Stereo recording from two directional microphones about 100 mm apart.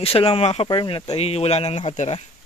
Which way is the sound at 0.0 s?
80° left.